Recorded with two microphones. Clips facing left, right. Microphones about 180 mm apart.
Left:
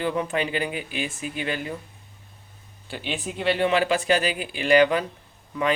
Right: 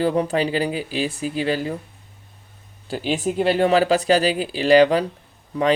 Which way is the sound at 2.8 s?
40° right (ahead or behind).